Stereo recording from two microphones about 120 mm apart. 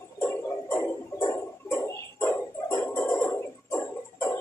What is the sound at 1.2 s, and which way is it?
Music, 25° left (ahead or behind).